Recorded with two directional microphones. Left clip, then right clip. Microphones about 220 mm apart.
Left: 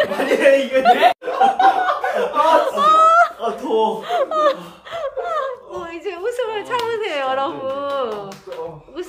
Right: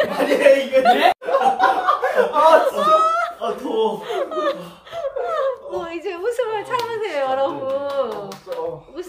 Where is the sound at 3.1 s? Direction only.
20° left (ahead or behind).